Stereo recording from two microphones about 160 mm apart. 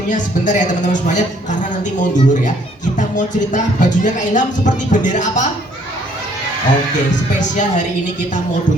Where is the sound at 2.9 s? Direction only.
50° left (ahead or behind).